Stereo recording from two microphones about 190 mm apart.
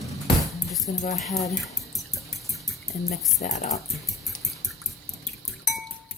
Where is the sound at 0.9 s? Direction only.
40° left (ahead or behind).